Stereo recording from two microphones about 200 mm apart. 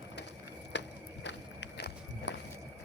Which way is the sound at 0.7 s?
60° left (ahead or behind).